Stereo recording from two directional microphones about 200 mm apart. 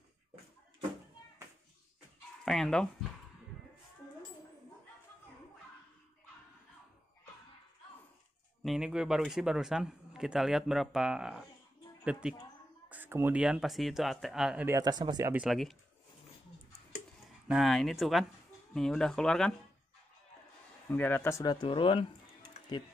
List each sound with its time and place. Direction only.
2.4 s speech: centre (ahead or behind)
8.6 s a man's voice: 5° right (ahead or behind)
14.8 s speech: 20° right (ahead or behind)
15.3 s a man's voice: centre (ahead or behind)
17.5 s a man's voice: centre (ahead or behind)
20.9 s speech: 10° left (ahead or behind)